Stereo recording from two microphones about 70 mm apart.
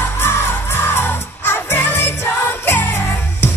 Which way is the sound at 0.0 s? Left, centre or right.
Left.